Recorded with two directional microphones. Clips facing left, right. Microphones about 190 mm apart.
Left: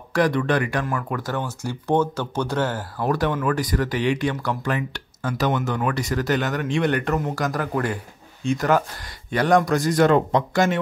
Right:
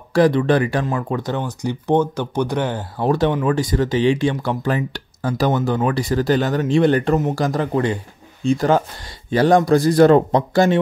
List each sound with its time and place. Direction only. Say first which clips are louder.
0.1 s speech: right 5 dB; 30° right (ahead or behind)
3.0 s speech: right 5 dB; 25° right (ahead or behind)